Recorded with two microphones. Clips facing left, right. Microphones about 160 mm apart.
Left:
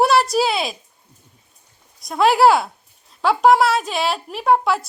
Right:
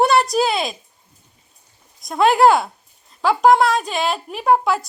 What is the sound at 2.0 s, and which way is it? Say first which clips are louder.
A woman's voice: even; centre (ahead or behind).